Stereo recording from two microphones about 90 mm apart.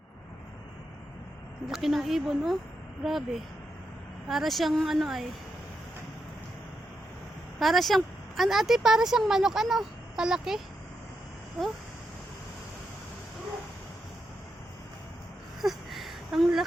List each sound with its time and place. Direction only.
1.6 s speech: 5° right (ahead or behind)
7.6 s speech: centre (ahead or behind)
15.6 s a sound: centre (ahead or behind)